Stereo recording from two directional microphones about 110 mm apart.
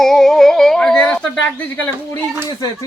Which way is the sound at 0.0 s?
5° left (ahead or behind).